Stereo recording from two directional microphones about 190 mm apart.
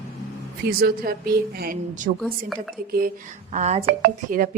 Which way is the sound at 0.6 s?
55° right (ahead or behind).